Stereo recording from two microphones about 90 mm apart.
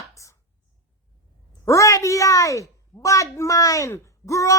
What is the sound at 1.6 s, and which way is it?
A woman's voice, 35° left (ahead or behind).